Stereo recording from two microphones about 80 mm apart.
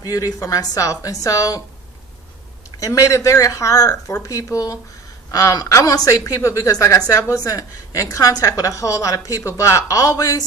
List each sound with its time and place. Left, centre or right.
0.0 s a woman's voice: left
2.7 s a woman's voice: left